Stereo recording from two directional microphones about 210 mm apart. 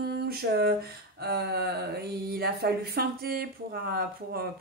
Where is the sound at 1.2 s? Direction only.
50° right (ahead or behind).